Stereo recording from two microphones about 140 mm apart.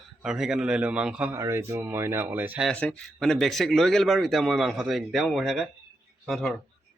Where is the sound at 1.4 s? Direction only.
20° right (ahead or behind).